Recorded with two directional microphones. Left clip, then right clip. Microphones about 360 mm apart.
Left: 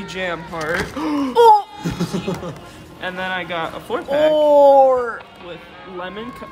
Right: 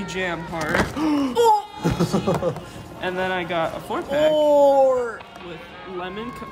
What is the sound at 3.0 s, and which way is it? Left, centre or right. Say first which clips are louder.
A woman's voice: even; centre.